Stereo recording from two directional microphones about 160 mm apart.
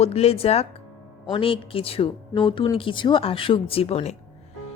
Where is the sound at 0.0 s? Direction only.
40° left (ahead or behind).